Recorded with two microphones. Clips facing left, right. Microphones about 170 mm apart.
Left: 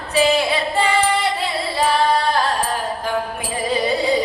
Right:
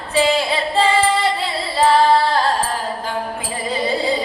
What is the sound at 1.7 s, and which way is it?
Singing, 25° right (ahead or behind).